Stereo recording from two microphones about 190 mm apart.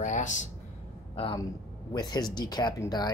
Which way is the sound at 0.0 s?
40° left (ahead or behind).